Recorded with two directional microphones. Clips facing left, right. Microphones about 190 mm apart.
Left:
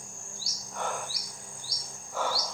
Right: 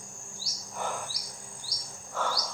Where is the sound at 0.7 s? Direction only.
Centre (ahead or behind).